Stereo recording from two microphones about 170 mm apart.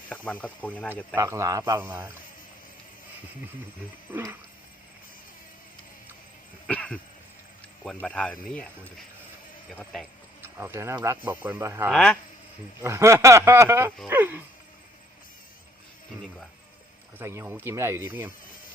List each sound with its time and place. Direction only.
0.1 s speech: 10° left (ahead or behind)
1.1 s a man's voice: 20° right (ahead or behind)
4.1 s speech: 10° right (ahead or behind)
6.7 s cough: 5° left (ahead or behind)
7.9 s speech: 5° left (ahead or behind)
9.7 s speech: centre (ahead or behind)
10.4 s speech: 15° right (ahead or behind)
11.9 s speech: 5° left (ahead or behind)
12.8 s speech: 15° right (ahead or behind)
17.2 s speech: 15° right (ahead or behind)